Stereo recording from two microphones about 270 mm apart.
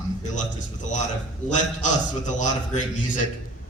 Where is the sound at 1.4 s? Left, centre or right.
Left.